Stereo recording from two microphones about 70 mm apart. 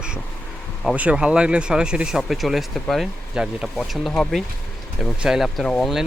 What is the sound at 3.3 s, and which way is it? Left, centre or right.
Speech, centre.